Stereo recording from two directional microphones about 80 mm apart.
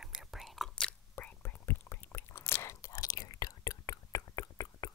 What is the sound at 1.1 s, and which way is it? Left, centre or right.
Whispering, left.